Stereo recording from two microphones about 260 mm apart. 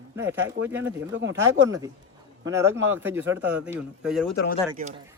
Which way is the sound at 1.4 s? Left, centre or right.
Centre.